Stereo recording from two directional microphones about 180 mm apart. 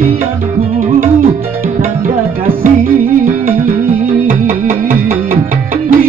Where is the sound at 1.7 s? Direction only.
50° right (ahead or behind).